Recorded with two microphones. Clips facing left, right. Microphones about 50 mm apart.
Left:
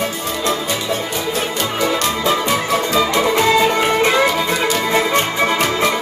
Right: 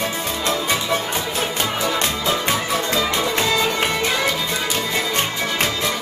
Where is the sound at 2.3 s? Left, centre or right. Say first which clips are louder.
Left 4 dB; left.